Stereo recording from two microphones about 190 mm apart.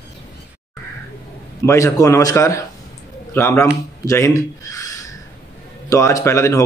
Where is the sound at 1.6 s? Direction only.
15° left (ahead or behind).